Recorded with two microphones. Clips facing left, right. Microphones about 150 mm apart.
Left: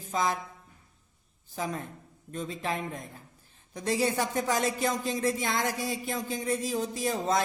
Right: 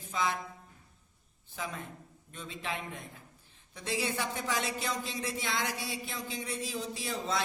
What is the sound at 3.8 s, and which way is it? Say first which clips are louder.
A man's voice: left 6 dB; 45° left (ahead or behind).